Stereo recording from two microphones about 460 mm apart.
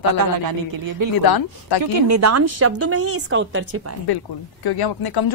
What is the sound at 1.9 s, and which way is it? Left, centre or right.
A woman's voice, right.